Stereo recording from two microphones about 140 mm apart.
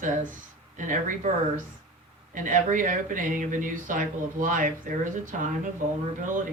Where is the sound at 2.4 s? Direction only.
70° right (ahead or behind).